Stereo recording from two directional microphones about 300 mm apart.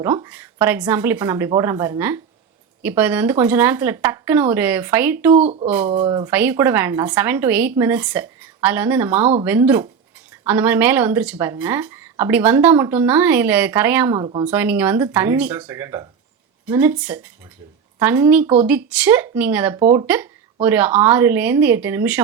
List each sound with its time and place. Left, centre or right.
0.0 s speech: centre
5.4 s speech: centre